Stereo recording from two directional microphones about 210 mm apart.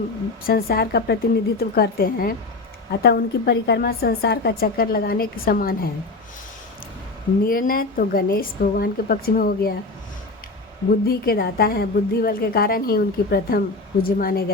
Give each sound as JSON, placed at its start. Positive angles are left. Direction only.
{"t": 0.4, "sound": "a woman's voice", "side_deg": 45}
{"t": 7.4, "sound": "a woman's voice", "side_deg": 45}
{"t": 11.0, "sound": "a woman's voice", "side_deg": 45}